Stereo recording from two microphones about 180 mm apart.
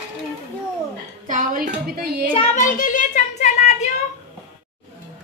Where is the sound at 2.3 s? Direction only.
35° left (ahead or behind).